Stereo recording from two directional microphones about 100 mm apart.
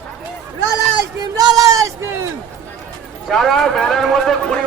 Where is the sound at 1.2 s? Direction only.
40° right (ahead or behind).